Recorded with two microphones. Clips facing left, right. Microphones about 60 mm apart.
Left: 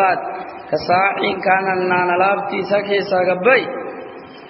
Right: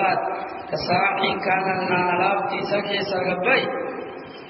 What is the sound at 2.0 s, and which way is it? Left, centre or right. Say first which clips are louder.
Speech: left 5 dB; left.